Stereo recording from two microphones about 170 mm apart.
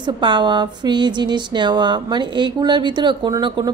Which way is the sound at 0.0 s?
25° right (ahead or behind).